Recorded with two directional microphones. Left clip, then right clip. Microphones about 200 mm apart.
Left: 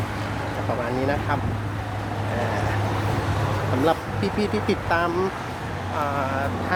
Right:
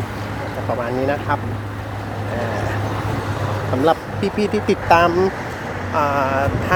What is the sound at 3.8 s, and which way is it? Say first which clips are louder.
Speech: right 6 dB; 15° right (ahead or behind).